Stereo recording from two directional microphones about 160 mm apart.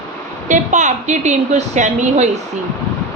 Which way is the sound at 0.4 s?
50° right (ahead or behind).